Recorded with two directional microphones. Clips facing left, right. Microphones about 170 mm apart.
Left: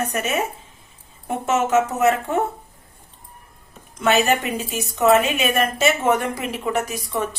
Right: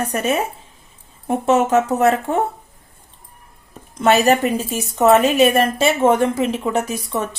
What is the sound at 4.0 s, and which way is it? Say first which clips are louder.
A woman's voice: right 4 dB; 35° right (ahead or behind).